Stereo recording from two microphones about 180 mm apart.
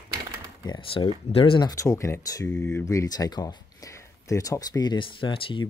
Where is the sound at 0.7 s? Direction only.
30° left (ahead or behind).